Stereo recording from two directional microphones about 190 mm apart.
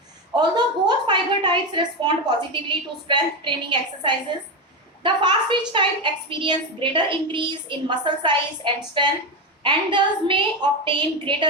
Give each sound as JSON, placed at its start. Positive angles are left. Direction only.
{"t": 0.3, "sound": "a woman's voice", "side_deg": -20}